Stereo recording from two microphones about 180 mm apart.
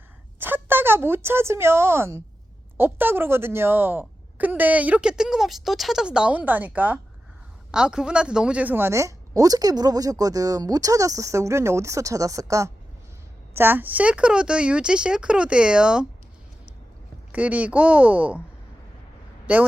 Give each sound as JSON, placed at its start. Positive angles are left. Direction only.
{"t": 0.3, "sound": "speech", "side_deg": -10}
{"t": 17.3, "sound": "speech", "side_deg": -10}
{"t": 19.5, "sound": "speech", "side_deg": -10}